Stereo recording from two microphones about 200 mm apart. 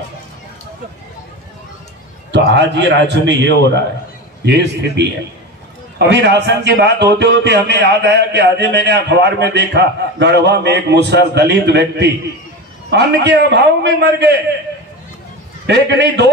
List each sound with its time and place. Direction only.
2.3 s a man's voice: 60° right (ahead or behind)
15.6 s a man's voice: 60° right (ahead or behind)